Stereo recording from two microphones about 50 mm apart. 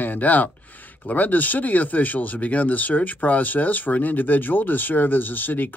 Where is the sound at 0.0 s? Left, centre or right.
Left.